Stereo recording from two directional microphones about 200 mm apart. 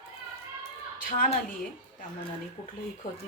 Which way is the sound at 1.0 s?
40° left (ahead or behind).